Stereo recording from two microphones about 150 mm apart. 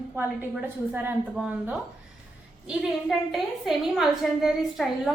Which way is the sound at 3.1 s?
Centre (ahead or behind).